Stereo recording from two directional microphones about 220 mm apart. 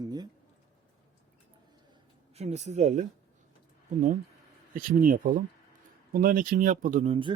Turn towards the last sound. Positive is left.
turn(degrees=-25)  # may be behind; listen again after turning